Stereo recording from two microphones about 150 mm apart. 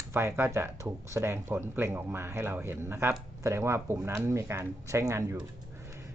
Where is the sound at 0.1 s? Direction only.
15° right (ahead or behind).